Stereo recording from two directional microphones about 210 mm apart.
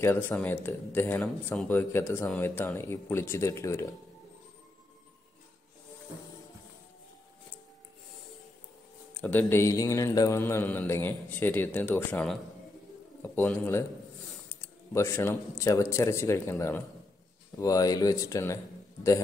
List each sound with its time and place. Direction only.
0.0 s speech: 10° left (ahead or behind)
9.2 s speech: 10° left (ahead or behind)